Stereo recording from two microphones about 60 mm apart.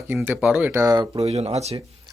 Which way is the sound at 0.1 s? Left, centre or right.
Right.